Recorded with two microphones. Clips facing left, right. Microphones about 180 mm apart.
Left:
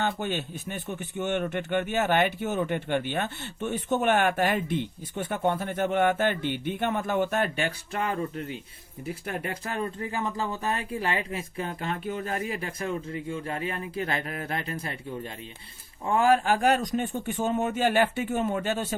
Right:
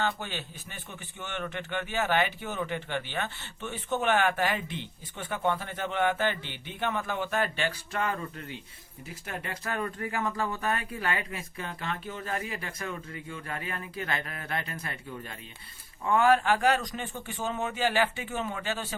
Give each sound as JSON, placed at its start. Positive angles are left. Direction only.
{"t": 0.0, "sound": "a man's voice", "side_deg": 55}
{"t": 9.2, "sound": "a man's voice", "side_deg": 30}
{"t": 14.2, "sound": "a man's voice", "side_deg": 40}